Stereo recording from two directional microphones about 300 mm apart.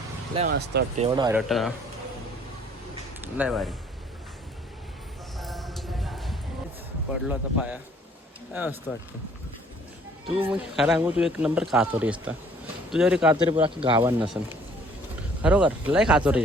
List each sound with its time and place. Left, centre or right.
0.3 s speech: right
1.0 s speech: centre
1.4 s a man's voice: centre
3.2 s speech: centre
5.4 s a sound: centre
7.1 s a man's voice: centre
10.4 s a man's voice: centre
13.3 s a man's voice: centre